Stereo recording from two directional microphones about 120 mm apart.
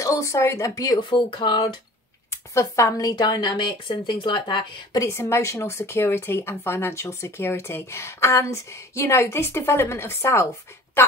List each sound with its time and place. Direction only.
0.0 s speech: 25° left (ahead or behind)
2.3 s speech: 25° left (ahead or behind)
5.0 s speech: 20° left (ahead or behind)